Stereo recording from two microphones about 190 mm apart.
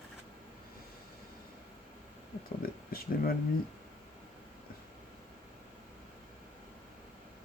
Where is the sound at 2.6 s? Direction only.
50° left (ahead or behind).